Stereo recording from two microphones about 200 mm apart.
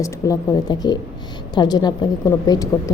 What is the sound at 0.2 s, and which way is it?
A woman's voice, 15° left (ahead or behind).